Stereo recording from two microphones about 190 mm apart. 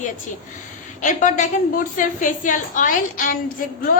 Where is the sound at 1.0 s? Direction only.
40° left (ahead or behind).